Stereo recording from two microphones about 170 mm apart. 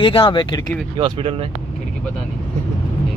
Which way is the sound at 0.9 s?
30° right (ahead or behind).